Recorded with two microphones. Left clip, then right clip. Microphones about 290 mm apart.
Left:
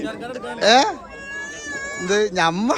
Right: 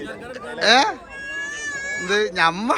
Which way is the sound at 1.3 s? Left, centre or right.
Left.